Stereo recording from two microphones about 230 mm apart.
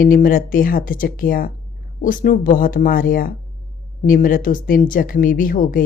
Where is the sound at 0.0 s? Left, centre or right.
Left.